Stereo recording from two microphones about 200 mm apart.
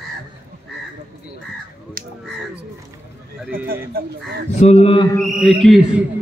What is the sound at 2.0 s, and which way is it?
Finger snapping, 45° right (ahead or behind).